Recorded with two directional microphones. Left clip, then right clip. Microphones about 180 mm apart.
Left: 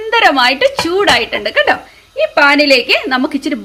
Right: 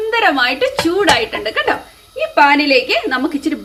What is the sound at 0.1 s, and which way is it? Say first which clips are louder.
A woman's voice: left 5 dB; 55° left (ahead or behind).